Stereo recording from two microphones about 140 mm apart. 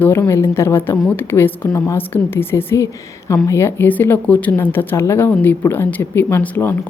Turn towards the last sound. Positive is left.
turn(degrees=15)  # may be behind; listen again after turning